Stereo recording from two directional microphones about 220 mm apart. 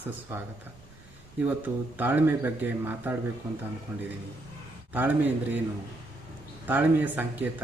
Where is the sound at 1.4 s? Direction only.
10° right (ahead or behind).